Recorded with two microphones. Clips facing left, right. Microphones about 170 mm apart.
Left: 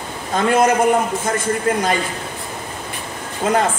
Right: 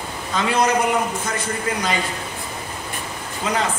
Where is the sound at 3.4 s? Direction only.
50° left (ahead or behind).